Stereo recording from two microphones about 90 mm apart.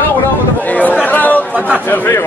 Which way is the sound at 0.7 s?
15° left (ahead or behind).